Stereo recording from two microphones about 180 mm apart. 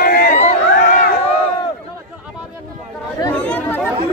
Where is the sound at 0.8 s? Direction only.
55° left (ahead or behind).